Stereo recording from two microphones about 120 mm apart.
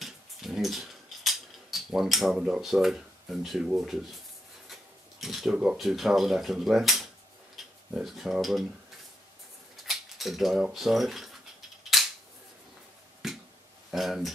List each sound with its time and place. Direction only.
0.0 s a sound: centre (ahead or behind)
5.2 s speech: centre (ahead or behind)
9.8 s speech: centre (ahead or behind)
11.9 s cap gun: centre (ahead or behind)
13.2 s finger snapping: 5° right (ahead or behind)
13.8 s speech: centre (ahead or behind)